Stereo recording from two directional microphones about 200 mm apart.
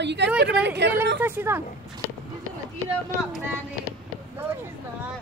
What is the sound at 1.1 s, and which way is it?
Speech, 10° right (ahead or behind).